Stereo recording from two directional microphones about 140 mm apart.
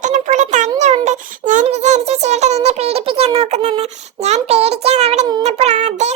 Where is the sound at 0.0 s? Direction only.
60° right (ahead or behind).